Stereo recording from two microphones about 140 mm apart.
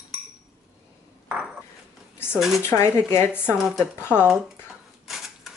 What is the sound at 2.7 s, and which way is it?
Speech, 20° left (ahead or behind).